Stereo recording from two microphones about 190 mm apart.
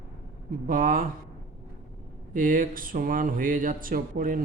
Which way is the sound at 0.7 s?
45° right (ahead or behind).